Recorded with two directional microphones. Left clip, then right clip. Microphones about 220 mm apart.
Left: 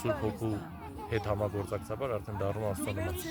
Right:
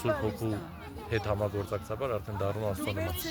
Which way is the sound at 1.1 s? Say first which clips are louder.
Right 2 dB; 5° right (ahead or behind).